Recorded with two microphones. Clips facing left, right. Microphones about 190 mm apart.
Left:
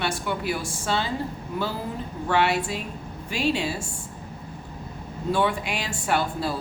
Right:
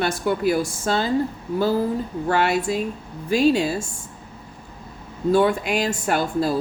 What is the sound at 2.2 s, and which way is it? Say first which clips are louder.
Speech: right 2 dB; 40° right (ahead or behind).